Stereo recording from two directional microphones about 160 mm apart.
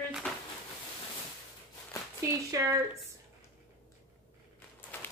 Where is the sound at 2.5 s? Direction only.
20° right (ahead or behind).